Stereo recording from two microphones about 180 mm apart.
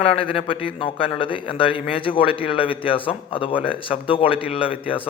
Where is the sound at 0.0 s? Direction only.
30° left (ahead or behind).